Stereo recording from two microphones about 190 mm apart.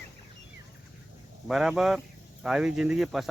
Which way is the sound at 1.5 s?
5° right (ahead or behind).